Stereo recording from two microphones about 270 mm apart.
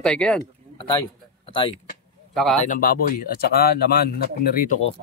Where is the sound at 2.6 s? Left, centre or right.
Left.